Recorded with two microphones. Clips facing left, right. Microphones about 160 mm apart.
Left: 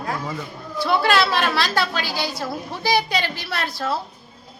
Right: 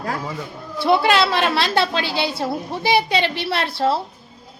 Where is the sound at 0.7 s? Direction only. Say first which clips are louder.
Right 3 dB; 25° right (ahead or behind).